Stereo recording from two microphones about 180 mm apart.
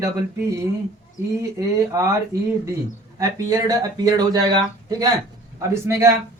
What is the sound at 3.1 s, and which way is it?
Speech, 20° right (ahead or behind).